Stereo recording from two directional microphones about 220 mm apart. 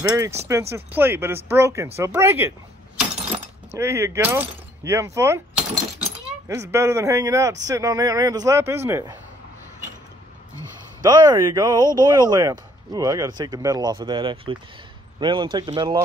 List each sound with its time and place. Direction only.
0.0 s speech: 15° right (ahead or behind)
3.7 s speech: 10° right (ahead or behind)
11.0 s speech: 15° right (ahead or behind)